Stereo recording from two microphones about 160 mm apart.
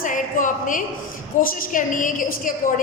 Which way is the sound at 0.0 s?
55° left (ahead or behind).